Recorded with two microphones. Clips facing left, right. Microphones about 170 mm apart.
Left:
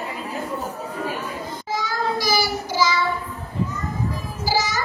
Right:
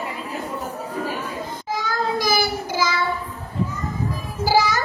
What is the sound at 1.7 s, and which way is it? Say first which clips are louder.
Child singing: right 1 dB; 55° right (ahead or behind).